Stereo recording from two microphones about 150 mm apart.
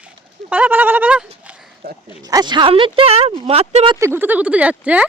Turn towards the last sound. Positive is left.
turn(degrees=-10)  # may be behind; listen again after turning